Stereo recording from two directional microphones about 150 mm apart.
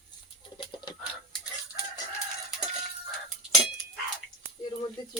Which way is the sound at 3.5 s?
5° right (ahead or behind).